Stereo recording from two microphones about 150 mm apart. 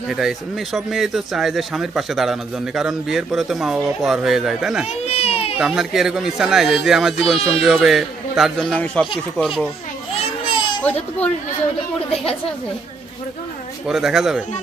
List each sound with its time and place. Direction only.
0.1 s speech: centre (ahead or behind)
5.0 s baby cry: 45° left (ahead or behind)
5.5 s speech: 5° right (ahead or behind)
7.3 s speech: 40° left (ahead or behind)
7.6 s speech: 5° right (ahead or behind)
10.8 s a child's voice: 10° left (ahead or behind)
13.8 s speech: 5° right (ahead or behind)